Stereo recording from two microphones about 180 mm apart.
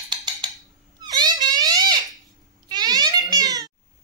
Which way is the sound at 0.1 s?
25° right (ahead or behind).